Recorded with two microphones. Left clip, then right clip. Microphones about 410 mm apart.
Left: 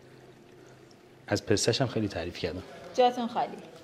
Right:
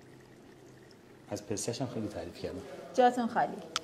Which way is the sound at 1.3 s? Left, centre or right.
Left.